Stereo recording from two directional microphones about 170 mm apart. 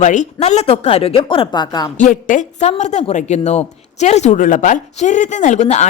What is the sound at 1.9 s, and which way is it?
A woman's voice, 50° left (ahead or behind).